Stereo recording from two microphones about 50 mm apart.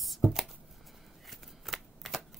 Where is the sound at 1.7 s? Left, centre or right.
Centre.